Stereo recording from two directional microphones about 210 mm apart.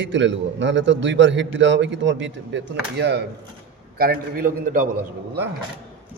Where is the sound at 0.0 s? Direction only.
60° right (ahead or behind); by 4.9 s 40° right (ahead or behind).